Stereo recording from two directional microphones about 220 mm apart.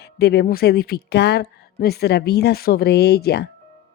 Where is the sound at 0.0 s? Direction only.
45° left (ahead or behind).